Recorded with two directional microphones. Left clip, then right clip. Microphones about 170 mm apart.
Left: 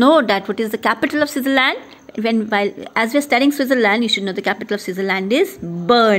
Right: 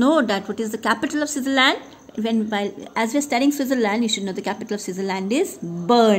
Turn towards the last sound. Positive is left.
turn(degrees=25)  # may be behind; listen again after turning